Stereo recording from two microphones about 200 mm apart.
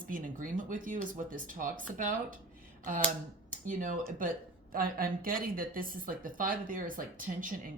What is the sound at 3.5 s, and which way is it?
Speech, 40° right (ahead or behind).